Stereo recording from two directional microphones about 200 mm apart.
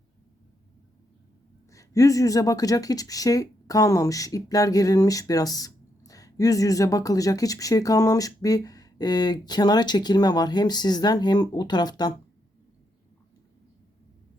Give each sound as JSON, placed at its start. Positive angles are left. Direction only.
{"t": 1.7, "sound": "speech", "side_deg": 15}